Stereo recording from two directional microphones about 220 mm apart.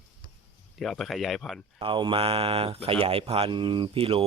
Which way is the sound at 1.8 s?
20° right (ahead or behind).